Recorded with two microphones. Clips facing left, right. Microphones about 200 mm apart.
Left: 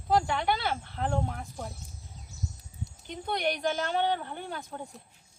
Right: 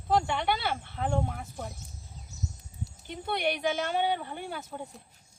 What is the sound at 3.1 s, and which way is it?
Speech, 5° right (ahead or behind).